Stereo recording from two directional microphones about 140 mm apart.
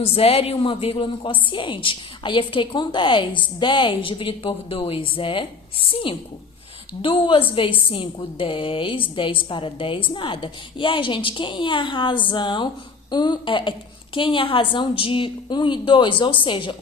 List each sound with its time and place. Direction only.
0.0 s a woman's voice: 45° left (ahead or behind)